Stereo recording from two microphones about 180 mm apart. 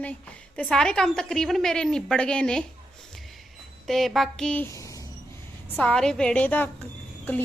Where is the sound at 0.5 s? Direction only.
5° left (ahead or behind).